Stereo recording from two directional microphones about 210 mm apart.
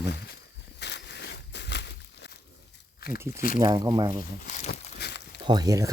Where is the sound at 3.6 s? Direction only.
20° right (ahead or behind).